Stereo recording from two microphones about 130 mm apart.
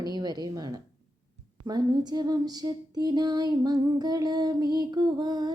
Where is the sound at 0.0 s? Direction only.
30° right (ahead or behind).